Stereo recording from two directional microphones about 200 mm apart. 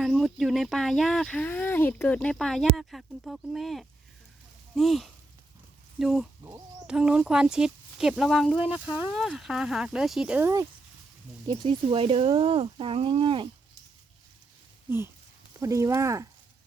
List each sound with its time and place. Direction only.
0.0 s speech: centre (ahead or behind)
8.5 s speech: 25° left (ahead or behind)
9.0 s speech: centre (ahead or behind)
11.4 s speech: 25° right (ahead or behind)
14.8 s speech: 10° right (ahead or behind)